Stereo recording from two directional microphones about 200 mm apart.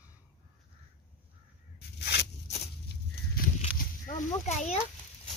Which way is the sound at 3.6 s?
35° left (ahead or behind).